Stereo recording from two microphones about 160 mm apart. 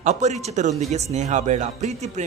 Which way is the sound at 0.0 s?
45° right (ahead or behind).